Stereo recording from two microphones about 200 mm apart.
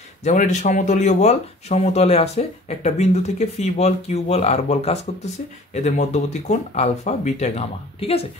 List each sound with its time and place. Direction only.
0.2 s speech: 35° left (ahead or behind)